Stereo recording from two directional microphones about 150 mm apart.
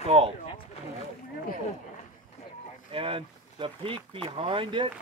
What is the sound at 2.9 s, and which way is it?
Speech, 35° right (ahead or behind).